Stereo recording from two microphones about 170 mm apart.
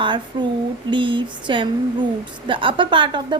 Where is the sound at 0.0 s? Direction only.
30° right (ahead or behind).